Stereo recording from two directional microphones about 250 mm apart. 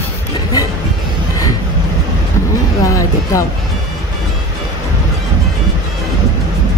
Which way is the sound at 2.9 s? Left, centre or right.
Centre.